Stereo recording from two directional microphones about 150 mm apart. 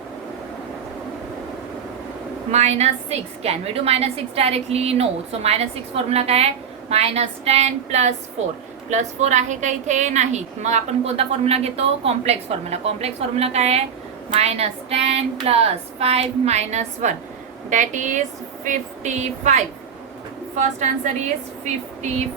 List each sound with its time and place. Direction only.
2.5 s a woman's voice: 45° right (ahead or behind)